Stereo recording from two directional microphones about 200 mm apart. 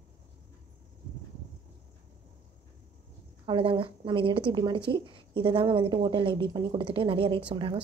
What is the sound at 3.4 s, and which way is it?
A woman's voice, 25° right (ahead or behind).